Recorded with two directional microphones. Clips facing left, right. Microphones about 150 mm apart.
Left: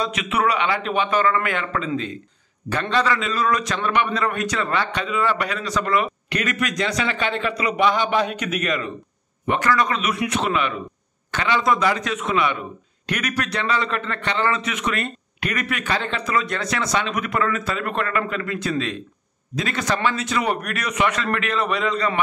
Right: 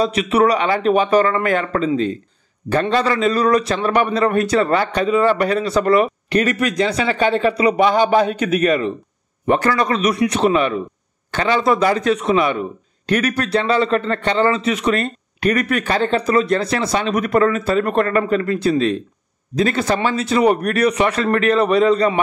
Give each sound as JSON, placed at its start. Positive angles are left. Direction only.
{"t": 0.0, "sound": "a man's voice", "side_deg": -35}